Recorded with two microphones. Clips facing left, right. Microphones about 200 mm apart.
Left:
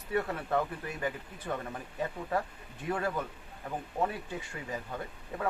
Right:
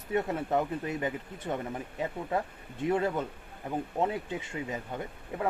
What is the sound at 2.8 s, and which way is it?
Speech, 20° right (ahead or behind).